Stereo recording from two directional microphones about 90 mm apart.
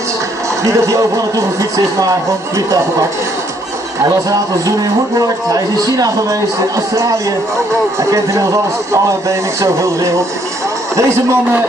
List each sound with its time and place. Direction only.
0.7 s a man's voice: 40° right (ahead or behind)
4.0 s a man's voice: 40° right (ahead or behind)
8.0 s a man's voice: 35° right (ahead or behind)